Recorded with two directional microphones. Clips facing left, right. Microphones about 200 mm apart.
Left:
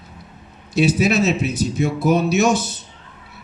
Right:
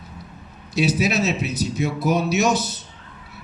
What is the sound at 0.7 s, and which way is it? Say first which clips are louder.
Speech: left 4 dB; 50° left (ahead or behind).